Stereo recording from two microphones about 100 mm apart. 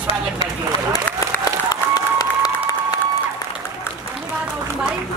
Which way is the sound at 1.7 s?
40° left (ahead or behind).